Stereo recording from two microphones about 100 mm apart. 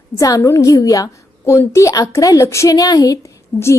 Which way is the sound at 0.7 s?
35° left (ahead or behind).